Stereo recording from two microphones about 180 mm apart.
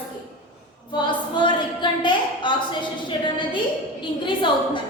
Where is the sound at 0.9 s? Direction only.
25° left (ahead or behind).